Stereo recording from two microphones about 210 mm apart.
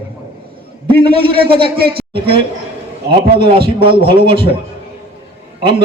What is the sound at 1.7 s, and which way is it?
Speech, 50° right (ahead or behind).